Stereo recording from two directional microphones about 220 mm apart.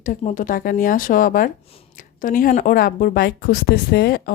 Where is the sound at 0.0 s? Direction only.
35° left (ahead or behind).